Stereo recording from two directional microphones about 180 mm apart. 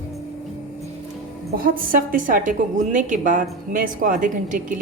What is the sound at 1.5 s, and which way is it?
A woman's voice, 50° right (ahead or behind).